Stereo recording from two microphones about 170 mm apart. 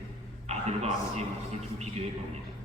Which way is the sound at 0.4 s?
40° right (ahead or behind).